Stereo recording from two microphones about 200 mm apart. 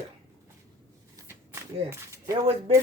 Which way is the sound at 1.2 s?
15° right (ahead or behind).